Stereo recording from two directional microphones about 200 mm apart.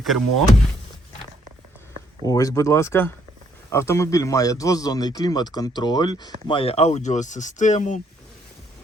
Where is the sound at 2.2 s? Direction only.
20° left (ahead or behind); by 8.0 s 35° left (ahead or behind).